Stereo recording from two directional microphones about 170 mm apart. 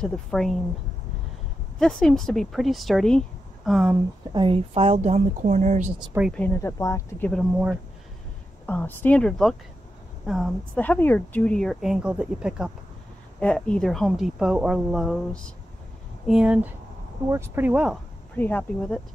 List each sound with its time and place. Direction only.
0.0 s speech: 5° left (ahead or behind)
1.8 s speech: 5° left (ahead or behind)
4.3 s a woman's voice: 30° right (ahead or behind)
6.3 s speech: 15° left (ahead or behind)
8.6 s speech: 10° left (ahead or behind)
10.8 s speech: 10° left (ahead or behind); by 12.7 s 5° right (ahead or behind)
13.4 s speech: 5° left (ahead or behind)
16.3 s speech: 5° right (ahead or behind)
18.3 s speech: 10° left (ahead or behind)